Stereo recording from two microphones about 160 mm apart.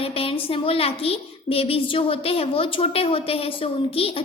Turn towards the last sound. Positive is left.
turn(degrees=35)  # may be behind; listen again after turning